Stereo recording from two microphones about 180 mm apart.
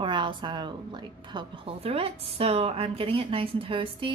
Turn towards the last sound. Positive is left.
turn(degrees=-30)  # may be behind; listen again after turning